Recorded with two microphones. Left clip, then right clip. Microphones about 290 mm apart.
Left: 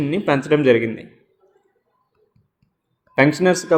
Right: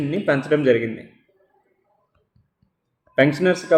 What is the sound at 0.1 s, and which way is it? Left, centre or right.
Speech, left.